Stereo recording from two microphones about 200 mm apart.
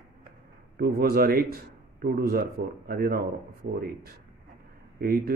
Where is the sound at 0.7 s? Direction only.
50° right (ahead or behind).